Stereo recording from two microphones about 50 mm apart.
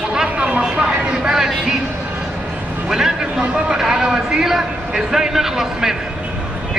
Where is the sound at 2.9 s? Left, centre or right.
Centre.